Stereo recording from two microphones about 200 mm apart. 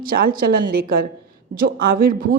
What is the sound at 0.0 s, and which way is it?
A woman's voice, 45° right (ahead or behind).